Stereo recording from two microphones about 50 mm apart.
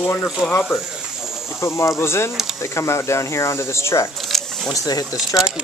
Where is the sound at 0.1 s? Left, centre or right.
Left.